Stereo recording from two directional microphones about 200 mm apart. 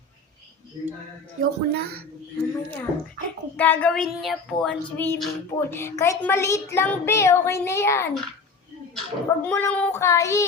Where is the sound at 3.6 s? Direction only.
10° left (ahead or behind).